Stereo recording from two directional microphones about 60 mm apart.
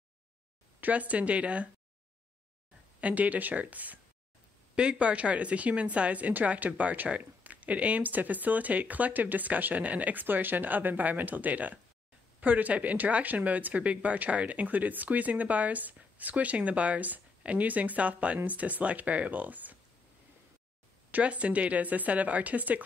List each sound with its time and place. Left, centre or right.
0.7 s speech: right
3.0 s speech: right
21.1 s speech: right